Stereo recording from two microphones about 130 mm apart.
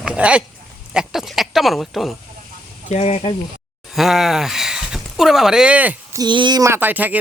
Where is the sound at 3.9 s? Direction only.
Centre (ahead or behind).